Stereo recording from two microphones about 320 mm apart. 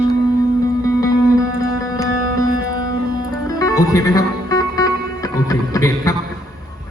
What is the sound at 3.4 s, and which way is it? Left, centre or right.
Music, centre.